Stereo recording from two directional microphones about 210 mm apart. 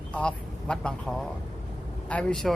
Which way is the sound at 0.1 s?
5° left (ahead or behind).